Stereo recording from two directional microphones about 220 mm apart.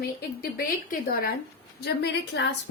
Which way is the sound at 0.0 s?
40° left (ahead or behind).